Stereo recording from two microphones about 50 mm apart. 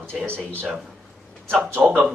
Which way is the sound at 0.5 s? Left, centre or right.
Right.